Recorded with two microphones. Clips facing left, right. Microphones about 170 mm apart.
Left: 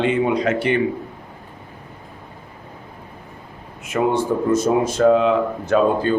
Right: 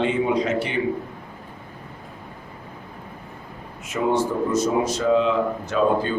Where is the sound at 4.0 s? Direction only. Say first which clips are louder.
Left 2 dB; 55° left (ahead or behind).